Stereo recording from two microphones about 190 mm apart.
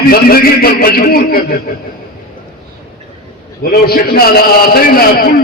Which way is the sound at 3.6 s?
50° left (ahead or behind).